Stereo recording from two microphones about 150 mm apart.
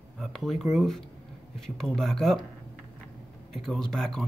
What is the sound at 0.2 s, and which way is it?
A man's voice, centre (ahead or behind).